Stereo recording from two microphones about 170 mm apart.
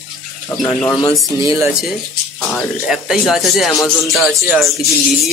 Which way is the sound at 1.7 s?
Centre (ahead or behind).